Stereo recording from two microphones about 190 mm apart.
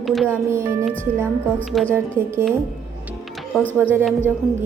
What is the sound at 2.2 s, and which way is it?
Speech, 45° right (ahead or behind).